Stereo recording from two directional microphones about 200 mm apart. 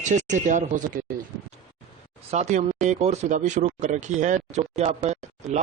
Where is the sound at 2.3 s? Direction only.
35° right (ahead or behind).